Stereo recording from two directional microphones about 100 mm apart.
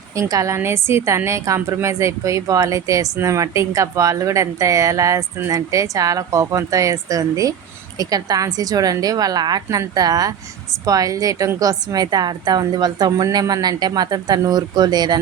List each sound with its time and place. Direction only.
0.2 s speech: 35° right (ahead or behind)